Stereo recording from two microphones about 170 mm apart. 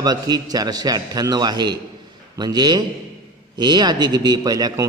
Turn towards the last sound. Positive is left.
turn(degrees=-20)  # may be behind; listen again after turning